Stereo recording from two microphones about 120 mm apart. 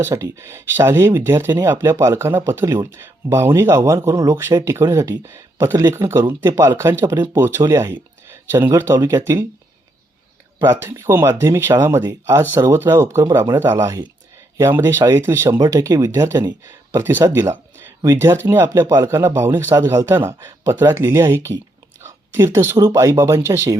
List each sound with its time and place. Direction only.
0.0 s speech: 25° right (ahead or behind)
10.7 s speech: 20° right (ahead or behind)